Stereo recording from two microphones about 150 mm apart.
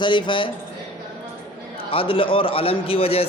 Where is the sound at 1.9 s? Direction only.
35° left (ahead or behind).